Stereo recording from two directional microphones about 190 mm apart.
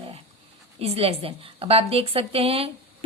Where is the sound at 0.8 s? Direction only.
30° right (ahead or behind).